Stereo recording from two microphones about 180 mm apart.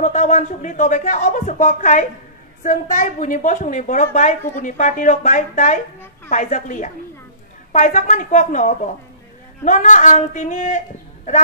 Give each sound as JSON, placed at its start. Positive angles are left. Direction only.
{"t": 0.0, "sound": "a woman's voice", "side_deg": 45}